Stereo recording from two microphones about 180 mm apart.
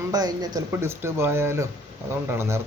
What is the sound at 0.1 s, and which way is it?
Speech, 20° right (ahead or behind).